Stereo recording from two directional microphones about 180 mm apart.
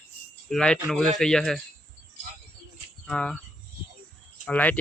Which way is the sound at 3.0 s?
5° left (ahead or behind).